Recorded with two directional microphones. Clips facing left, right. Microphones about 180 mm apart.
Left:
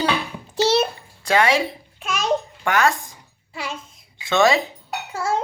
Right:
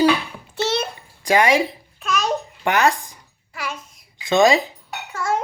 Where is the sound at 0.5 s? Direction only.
35° left (ahead or behind).